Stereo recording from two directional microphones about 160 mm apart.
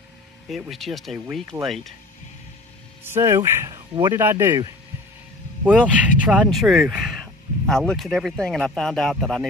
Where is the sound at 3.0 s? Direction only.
15° right (ahead or behind).